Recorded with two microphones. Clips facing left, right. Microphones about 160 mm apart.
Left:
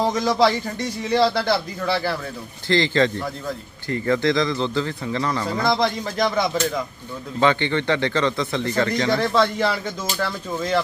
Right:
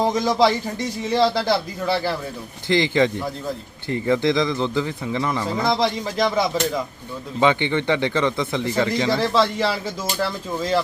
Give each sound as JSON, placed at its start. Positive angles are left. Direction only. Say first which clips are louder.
{"t": 0.2, "sound": "speech", "louder": "even", "side_deg": 0}
{"t": 2.6, "sound": "a man's voice", "louder": "right 1 dB", "side_deg": -15}
{"t": 5.6, "sound": "speech", "louder": "even", "side_deg": 0}
{"t": 7.3, "sound": "a man's voice", "louder": "right 1 dB", "side_deg": -15}